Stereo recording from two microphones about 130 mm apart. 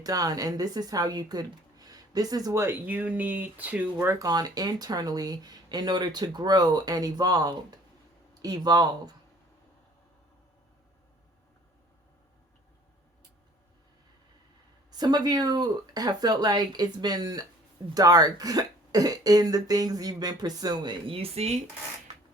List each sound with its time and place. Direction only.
0.0 s a woman's voice: 30° right (ahead or behind); by 3.8 s 15° right (ahead or behind)
3.9 s speech: 25° right (ahead or behind)
14.9 s a woman's voice: 30° right (ahead or behind); by 21.6 s 55° right (ahead or behind)